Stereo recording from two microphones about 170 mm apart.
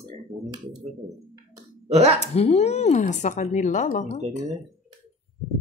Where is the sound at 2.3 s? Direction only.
40° left (ahead or behind).